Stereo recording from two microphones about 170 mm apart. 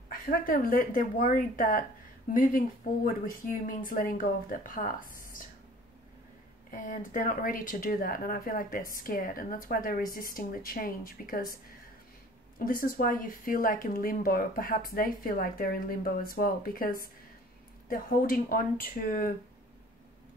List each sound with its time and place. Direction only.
0.1 s speech: 55° left (ahead or behind)
6.7 s speech: 50° left (ahead or behind)
12.5 s speech: 55° left (ahead or behind)